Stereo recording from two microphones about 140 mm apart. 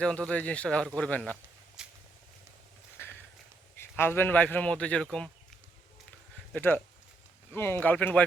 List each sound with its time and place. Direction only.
0.0 s a man's voice: 10° left (ahead or behind)
1.8 s vehicle: 5° right (ahead or behind)
3.0 s a sound: 15° left (ahead or behind)
3.8 s a man's voice: 15° left (ahead or behind)
6.5 s a man's voice: 15° left (ahead or behind)